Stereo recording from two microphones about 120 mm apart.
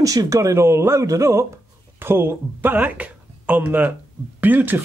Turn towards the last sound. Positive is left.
turn(degrees=-15)  # may be behind; listen again after turning